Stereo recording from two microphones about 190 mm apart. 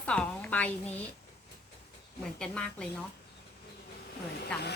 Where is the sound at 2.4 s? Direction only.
5° left (ahead or behind).